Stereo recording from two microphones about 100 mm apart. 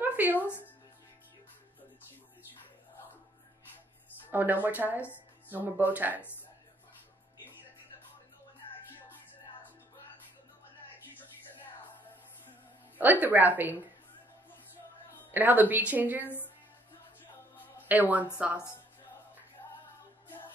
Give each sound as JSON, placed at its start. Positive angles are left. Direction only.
{"t": 0.0, "sound": "a sound", "side_deg": -15}
{"t": 4.3, "sound": "a woman's voice", "side_deg": -20}
{"t": 12.9, "sound": "a woman's voice", "side_deg": -15}
{"t": 15.3, "sound": "a woman's voice", "side_deg": -15}
{"t": 17.8, "sound": "a woman's voice", "side_deg": -15}